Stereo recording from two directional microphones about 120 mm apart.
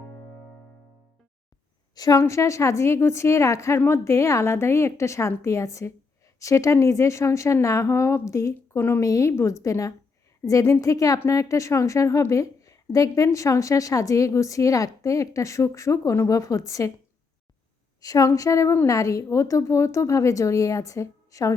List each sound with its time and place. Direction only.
2.0 s a woman's voice: 30° left (ahead or behind)
18.0 s a woman's voice: 30° left (ahead or behind)